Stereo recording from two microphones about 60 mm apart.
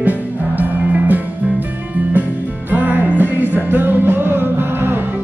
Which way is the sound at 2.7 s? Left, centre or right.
Right.